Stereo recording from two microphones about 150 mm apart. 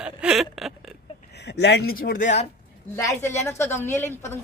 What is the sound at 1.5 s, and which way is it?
Speech, 90° left.